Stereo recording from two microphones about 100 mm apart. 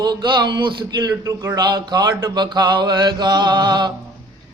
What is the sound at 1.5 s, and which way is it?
Mantra, 45° right (ahead or behind).